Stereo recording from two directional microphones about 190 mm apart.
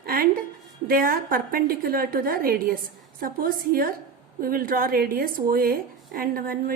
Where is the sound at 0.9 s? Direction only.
50° right (ahead or behind).